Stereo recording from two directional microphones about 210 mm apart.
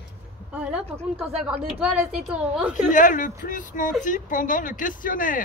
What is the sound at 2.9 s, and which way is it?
Speech, 40° left (ahead or behind).